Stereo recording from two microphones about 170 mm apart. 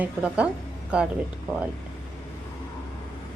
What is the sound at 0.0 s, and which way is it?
Speech, 5° right (ahead or behind).